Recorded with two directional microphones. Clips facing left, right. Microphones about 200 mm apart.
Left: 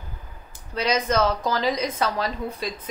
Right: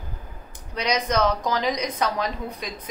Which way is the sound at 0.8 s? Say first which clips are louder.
Left 1 dB; 15° right (ahead or behind).